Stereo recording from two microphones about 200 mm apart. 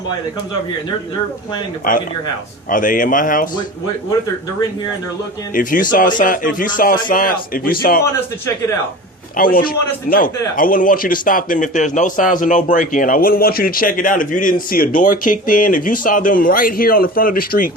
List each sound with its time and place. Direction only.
2.6 s speech: 40° left (ahead or behind)
5.5 s a man's voice: 40° left (ahead or behind)
9.4 s a man's voice: 45° left (ahead or behind)